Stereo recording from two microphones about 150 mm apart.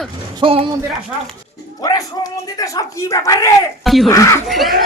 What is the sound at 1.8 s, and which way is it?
A woman's voice, 25° left (ahead or behind).